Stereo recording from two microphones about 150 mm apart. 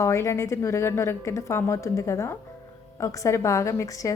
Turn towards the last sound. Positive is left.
turn(degrees=20)  # may be behind; listen again after turning